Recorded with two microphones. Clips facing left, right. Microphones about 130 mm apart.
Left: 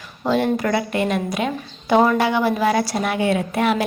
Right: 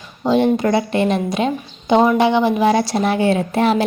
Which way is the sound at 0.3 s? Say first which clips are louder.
Right 4 dB; 20° right (ahead or behind).